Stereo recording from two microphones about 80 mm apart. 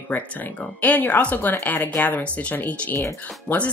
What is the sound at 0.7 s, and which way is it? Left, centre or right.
Speech, left.